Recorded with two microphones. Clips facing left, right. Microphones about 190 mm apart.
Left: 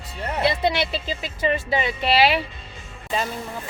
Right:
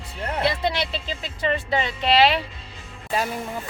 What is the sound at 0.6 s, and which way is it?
Speech, 5° left (ahead or behind).